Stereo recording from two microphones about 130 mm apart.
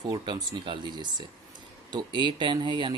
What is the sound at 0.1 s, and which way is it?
Speech, 35° right (ahead or behind).